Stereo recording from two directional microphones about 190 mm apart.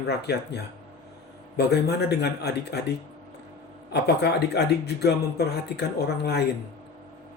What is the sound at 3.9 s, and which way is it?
Speech, 60° left (ahead or behind).